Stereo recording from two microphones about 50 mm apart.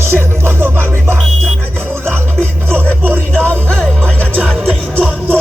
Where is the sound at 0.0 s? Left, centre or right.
Right.